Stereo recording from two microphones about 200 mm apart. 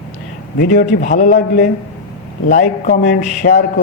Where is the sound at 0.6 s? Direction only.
50° left (ahead or behind).